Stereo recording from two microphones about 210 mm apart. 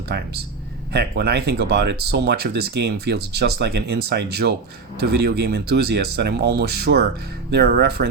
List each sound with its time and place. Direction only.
0.1 s speech: 50° right (ahead or behind)